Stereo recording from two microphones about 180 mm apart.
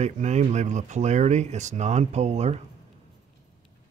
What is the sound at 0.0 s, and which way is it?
Speech, 40° right (ahead or behind).